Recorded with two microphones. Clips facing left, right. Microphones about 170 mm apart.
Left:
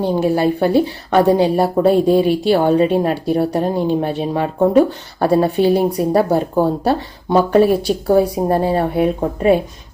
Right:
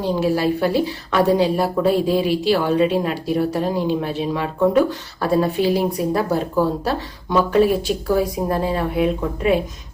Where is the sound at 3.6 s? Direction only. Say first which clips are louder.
Left 3 dB; 50° left (ahead or behind).